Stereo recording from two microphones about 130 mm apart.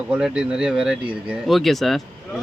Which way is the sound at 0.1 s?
5° right (ahead or behind).